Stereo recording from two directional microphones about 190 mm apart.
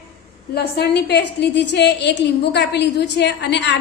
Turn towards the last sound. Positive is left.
turn(degrees=65)  # may be behind; listen again after turning